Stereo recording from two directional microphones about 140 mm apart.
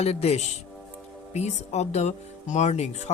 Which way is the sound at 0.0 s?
50° left (ahead or behind).